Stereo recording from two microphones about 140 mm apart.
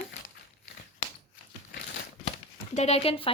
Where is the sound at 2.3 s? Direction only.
50° left (ahead or behind).